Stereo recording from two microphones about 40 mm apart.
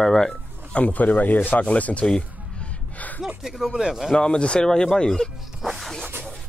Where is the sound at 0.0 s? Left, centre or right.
Centre.